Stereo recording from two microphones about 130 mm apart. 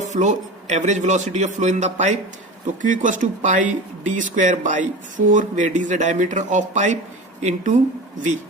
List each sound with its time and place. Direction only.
0.0 s a man's voice: 65° right (ahead or behind)
2.8 s speech: 80° right